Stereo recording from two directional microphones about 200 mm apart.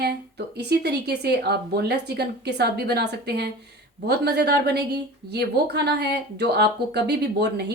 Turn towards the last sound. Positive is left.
turn(degrees=-55)  # may be behind; listen again after turning